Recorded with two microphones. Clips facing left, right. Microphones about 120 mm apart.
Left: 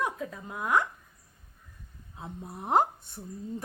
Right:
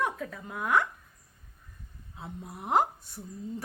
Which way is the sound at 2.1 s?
20° left (ahead or behind).